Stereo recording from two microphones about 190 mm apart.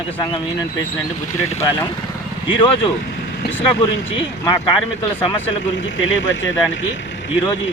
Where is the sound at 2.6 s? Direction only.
25° left (ahead or behind).